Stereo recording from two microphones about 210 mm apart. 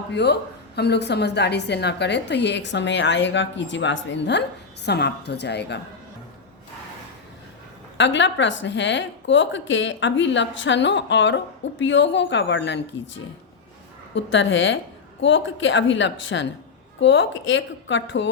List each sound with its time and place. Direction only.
0.1 s a woman's voice: 55° left (ahead or behind)
7.9 s a woman's voice: 60° left (ahead or behind)
14.1 s a woman's voice: 60° left (ahead or behind)